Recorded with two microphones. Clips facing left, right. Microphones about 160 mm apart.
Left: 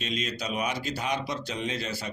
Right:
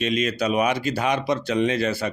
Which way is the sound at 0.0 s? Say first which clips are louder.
Right 9 dB; 65° right (ahead or behind).